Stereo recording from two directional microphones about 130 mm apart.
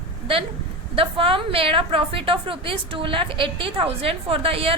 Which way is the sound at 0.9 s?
45° right (ahead or behind).